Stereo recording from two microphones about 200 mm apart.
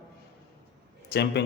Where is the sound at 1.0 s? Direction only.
55° left (ahead or behind).